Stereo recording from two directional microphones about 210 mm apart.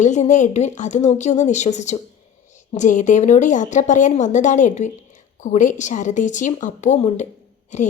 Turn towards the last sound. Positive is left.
turn(degrees=35)  # may be behind; listen again after turning